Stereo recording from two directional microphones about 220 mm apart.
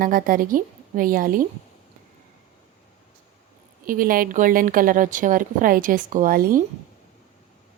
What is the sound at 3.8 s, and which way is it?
A woman's voice, 40° right (ahead or behind).